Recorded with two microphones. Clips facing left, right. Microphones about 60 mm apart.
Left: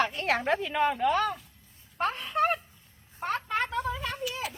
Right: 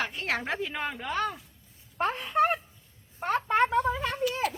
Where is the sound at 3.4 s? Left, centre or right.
Right.